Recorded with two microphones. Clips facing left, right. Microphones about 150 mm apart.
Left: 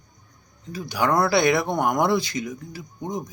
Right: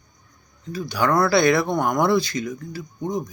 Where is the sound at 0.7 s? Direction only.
20° left (ahead or behind).